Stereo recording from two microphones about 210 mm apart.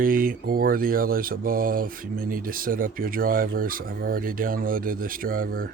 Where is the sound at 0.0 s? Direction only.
40° right (ahead or behind).